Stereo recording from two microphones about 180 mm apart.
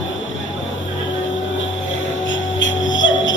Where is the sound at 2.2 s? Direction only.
90° left.